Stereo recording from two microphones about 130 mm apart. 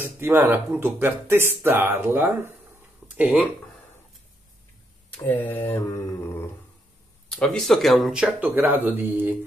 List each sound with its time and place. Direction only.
0.0 s speech: 15° right (ahead or behind)
5.1 s mantra: 15° left (ahead or behind)
6.0 s dog: 20° left (ahead or behind)
7.2 s speech: 5° left (ahead or behind); by 9.3 s 15° right (ahead or behind)